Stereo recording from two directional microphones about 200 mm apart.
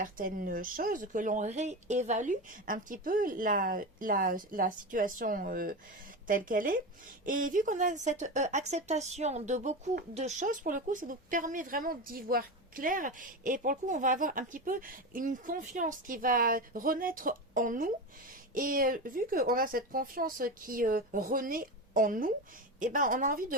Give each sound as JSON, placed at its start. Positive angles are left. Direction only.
{"t": 0.0, "sound": "speech", "side_deg": -45}